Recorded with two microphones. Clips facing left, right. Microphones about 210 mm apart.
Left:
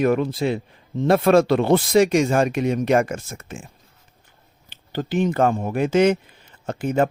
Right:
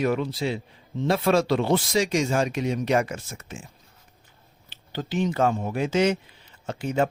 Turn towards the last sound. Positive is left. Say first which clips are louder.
# left 4 dB
turn(degrees=55)  # may be behind; listen again after turning